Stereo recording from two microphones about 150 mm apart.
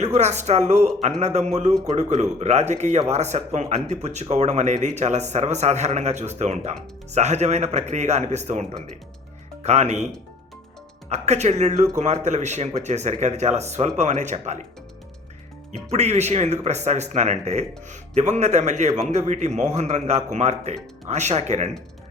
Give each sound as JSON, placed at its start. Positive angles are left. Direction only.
{"t": 0.0, "sound": "speech", "side_deg": -50}
{"t": 9.6, "sound": "speech", "side_deg": -50}
{"t": 11.1, "sound": "speech", "side_deg": -50}
{"t": 15.7, "sound": "speech", "side_deg": -45}